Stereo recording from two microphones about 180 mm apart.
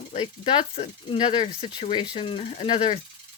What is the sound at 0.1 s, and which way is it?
Speech, 30° left (ahead or behind).